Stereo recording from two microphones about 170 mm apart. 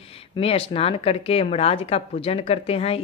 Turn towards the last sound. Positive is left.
turn(degrees=35)  # may be behind; listen again after turning